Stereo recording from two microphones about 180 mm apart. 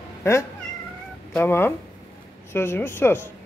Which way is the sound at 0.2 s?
15° left (ahead or behind).